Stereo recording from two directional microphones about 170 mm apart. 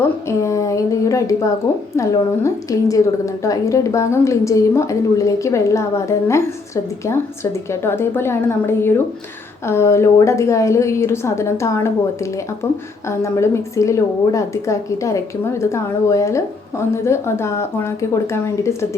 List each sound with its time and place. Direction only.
0.3 s a woman's voice: 15° left (ahead or behind)
7.7 s a woman's voice: 15° left (ahead or behind)